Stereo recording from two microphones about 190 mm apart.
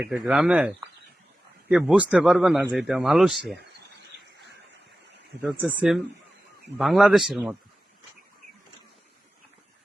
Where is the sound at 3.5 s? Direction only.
65° right (ahead or behind).